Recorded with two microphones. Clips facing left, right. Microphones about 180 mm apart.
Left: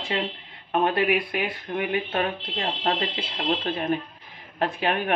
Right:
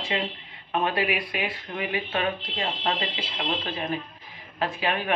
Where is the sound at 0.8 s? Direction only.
50° left (ahead or behind).